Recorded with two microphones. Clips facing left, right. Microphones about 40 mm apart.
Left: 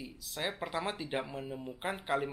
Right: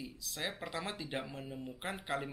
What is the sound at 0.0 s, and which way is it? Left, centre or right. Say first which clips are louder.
Speech: left 3 dB; centre.